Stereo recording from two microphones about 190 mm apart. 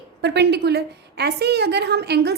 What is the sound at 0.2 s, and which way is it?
A woman's voice, 65° right (ahead or behind).